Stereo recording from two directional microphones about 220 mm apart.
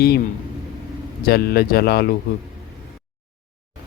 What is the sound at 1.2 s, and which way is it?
Speech, 45° left (ahead or behind).